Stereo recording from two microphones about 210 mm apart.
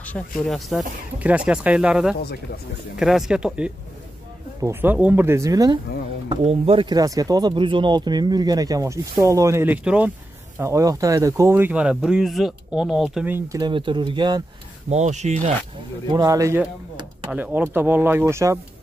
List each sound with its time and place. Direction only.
0.4 s speech: centre (ahead or behind); by 5.8 s 20° right (ahead or behind)
6.2 s speech: 30° right (ahead or behind)
14.9 s speech: 35° right (ahead or behind)
16.1 s speech: 15° right (ahead or behind)